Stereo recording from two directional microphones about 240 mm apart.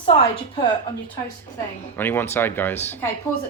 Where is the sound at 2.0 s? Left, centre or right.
Centre.